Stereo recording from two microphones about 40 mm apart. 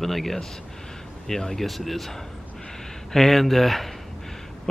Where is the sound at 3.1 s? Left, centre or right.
Centre.